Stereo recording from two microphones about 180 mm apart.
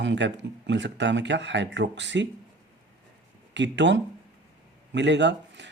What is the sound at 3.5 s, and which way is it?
Speech, 80° right.